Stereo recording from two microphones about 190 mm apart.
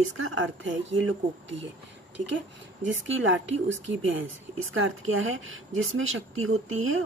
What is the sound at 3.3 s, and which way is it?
Speech, 80° right.